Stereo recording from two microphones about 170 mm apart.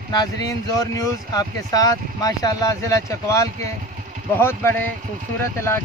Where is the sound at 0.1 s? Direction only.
20° left (ahead or behind).